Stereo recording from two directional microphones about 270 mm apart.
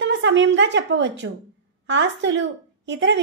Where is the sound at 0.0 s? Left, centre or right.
Right.